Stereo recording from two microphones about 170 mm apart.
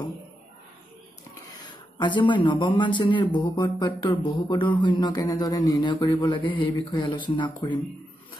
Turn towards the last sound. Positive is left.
turn(degrees=25)  # may be behind; listen again after turning